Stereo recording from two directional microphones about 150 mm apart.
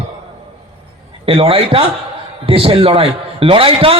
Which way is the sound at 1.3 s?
40° right (ahead or behind).